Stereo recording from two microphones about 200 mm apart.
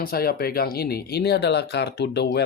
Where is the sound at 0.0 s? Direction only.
50° left (ahead or behind).